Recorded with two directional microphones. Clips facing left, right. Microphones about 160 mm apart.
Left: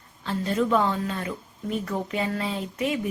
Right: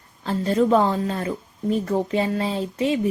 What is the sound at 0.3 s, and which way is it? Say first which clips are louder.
Speech: right 5 dB; 35° right (ahead or behind).